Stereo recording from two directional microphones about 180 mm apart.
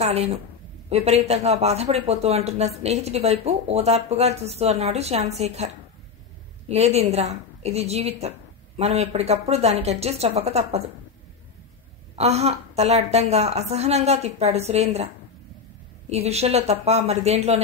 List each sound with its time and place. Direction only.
0.0 s a woman's voice: 35° right (ahead or behind)
6.7 s speech: 35° right (ahead or behind)
12.2 s speech: 35° right (ahead or behind)
16.1 s speech: 35° right (ahead or behind)